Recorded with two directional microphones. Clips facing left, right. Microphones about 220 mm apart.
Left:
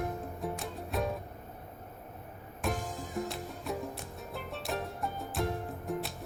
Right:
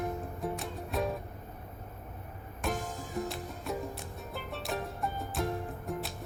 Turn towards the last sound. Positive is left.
turn(degrees=0)  # may be behind; listen again after turning